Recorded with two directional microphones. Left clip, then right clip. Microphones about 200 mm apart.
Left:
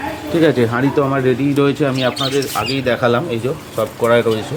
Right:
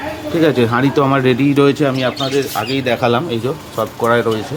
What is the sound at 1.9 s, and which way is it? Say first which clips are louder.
Speech: even; 5° right (ahead or behind).